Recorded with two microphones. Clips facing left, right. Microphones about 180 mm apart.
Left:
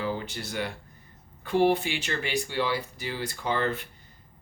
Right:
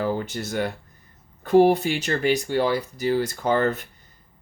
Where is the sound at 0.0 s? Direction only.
50° right (ahead or behind).